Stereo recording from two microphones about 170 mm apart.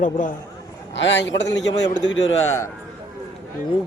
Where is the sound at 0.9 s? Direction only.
90° left.